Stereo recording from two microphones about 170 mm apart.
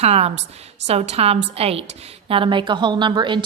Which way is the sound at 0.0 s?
35° right (ahead or behind).